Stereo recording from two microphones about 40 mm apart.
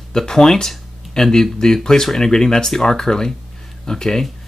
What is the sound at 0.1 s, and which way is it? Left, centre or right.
Speech, centre.